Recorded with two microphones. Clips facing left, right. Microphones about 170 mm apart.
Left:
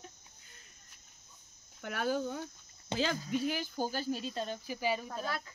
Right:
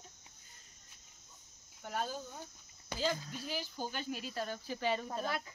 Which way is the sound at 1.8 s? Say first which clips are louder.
Left 6 dB; 75° left (ahead or behind).